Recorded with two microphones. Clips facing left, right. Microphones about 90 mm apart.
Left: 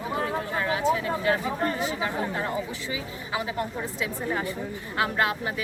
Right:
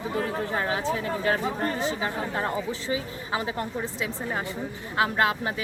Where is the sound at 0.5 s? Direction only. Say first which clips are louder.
Left 4 dB; 35° right (ahead or behind).